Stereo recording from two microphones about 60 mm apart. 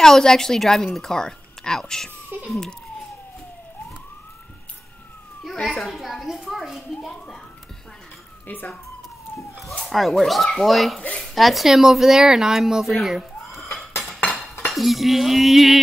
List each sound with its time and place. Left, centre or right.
0.0 s a woman's voice: centre
2.3 s speech: right
5.4 s speech: centre
7.0 s a sound: centre
8.5 s speech: left
9.8 s speech: centre
12.9 s a sound: centre
14.0 s cutlery: centre
14.7 s speech: centre